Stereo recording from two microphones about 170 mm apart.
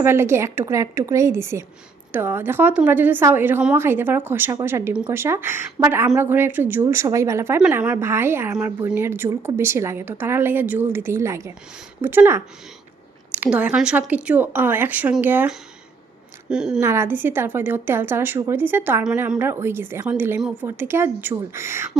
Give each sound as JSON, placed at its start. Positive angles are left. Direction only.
{"t": 0.0, "sound": "a woman's voice", "side_deg": -15}
{"t": 13.4, "sound": "a woman's voice", "side_deg": -10}